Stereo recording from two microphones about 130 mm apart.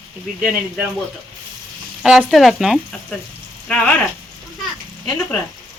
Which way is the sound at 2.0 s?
5° right (ahead or behind).